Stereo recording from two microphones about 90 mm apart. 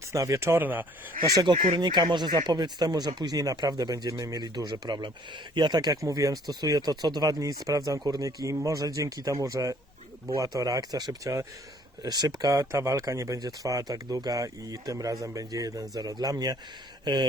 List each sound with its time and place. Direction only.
0.1 s speech: 35° right (ahead or behind)
1.5 s speech: 65° right (ahead or behind); by 11.4 s 35° right (ahead or behind)
12.0 s speech: 50° right (ahead or behind)
12.5 s speech: 35° right (ahead or behind)